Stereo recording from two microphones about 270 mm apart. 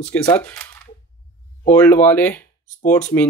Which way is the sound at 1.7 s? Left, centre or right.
Centre.